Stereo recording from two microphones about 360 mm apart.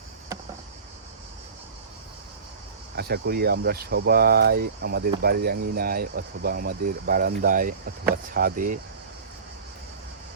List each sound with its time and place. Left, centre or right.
2.9 s speech: right